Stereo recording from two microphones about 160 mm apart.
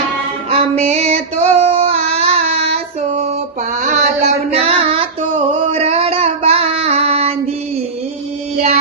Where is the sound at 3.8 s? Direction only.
50° right (ahead or behind).